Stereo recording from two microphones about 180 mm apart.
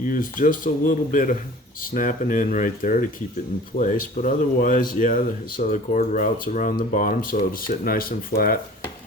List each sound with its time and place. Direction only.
0.0 s speech: 50° left (ahead or behind)